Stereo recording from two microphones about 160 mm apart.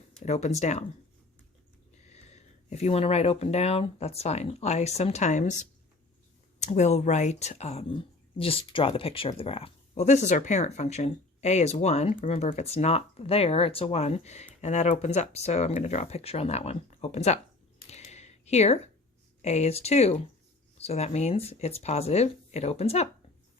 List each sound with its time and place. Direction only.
0.2 s speech: 45° left (ahead or behind)
2.0 s speech: 45° left (ahead or behind)
17.8 s a sound: 45° left (ahead or behind)
19.4 s speech: 45° left (ahead or behind)